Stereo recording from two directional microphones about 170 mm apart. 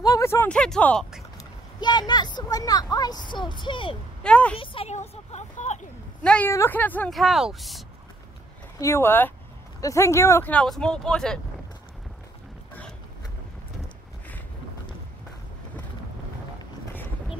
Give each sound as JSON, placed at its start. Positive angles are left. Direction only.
{"t": 0.0, "sound": "a woman's voice", "side_deg": 20}
{"t": 1.8, "sound": "speech", "side_deg": 25}
{"t": 4.2, "sound": "speech", "side_deg": 5}
{"t": 4.6, "sound": "speech", "side_deg": 35}
{"t": 6.2, "sound": "a woman's voice", "side_deg": 5}
{"t": 8.7, "sound": "speech", "side_deg": 15}